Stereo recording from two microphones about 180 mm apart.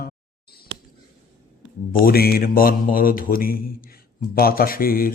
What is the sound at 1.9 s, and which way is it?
A man's voice, 55° left (ahead or behind).